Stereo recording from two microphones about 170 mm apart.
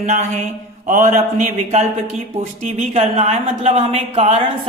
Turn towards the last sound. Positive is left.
turn(degrees=-40)  # may be behind; listen again after turning